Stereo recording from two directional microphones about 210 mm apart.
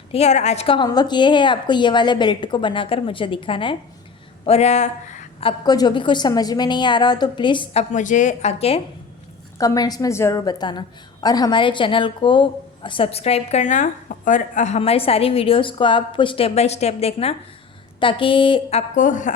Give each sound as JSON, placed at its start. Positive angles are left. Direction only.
{"t": 0.1, "sound": "a woman's voice", "side_deg": 30}
{"t": 9.6, "sound": "a woman's voice", "side_deg": 15}